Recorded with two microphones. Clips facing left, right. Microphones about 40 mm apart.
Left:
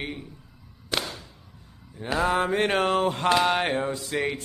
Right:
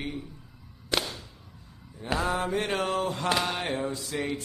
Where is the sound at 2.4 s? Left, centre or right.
Left.